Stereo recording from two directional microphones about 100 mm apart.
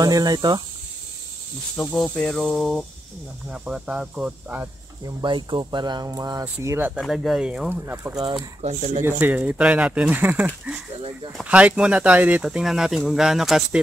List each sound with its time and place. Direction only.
0.0 s speech: 40° right (ahead or behind)
2.0 s speech: 10° left (ahead or behind)
3.4 s speech: 10° right (ahead or behind)
5.0 s speech: 50° right (ahead or behind)
6.0 s speech: 35° right (ahead or behind)
7.0 s speech: 5° right (ahead or behind)
7.7 s speech: 20° right (ahead or behind)
8.2 s speech: 40° right (ahead or behind)
9.0 s speech: 15° right (ahead or behind)
11.4 s speech: 10° right (ahead or behind)